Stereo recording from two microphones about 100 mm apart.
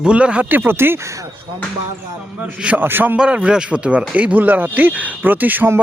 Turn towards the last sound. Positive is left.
turn(degrees=-20)  # may be behind; listen again after turning